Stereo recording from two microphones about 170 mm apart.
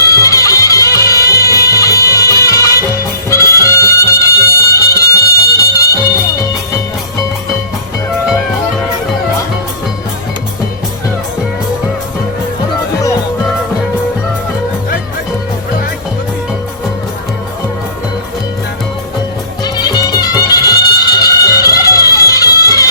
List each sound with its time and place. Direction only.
0.1 s music: 20° left (ahead or behind)
19.6 s music: 25° left (ahead or behind)